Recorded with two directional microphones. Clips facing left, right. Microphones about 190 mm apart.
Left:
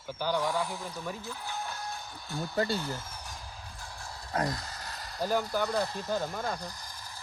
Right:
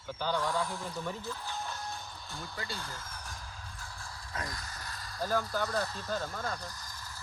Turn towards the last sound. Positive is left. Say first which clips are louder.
# left 4 dB
turn(degrees=15)  # may be behind; listen again after turning